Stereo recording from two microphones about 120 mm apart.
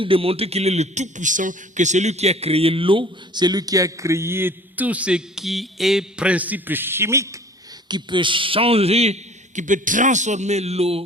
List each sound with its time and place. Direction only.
0.0 s a man's voice: 50° right (ahead or behind); by 7.3 s 20° right (ahead or behind)
7.9 s speech: 40° right (ahead or behind); by 9.1 s 60° right (ahead or behind)
9.6 s a man's voice: 90° right; by 11.0 s 55° right (ahead or behind)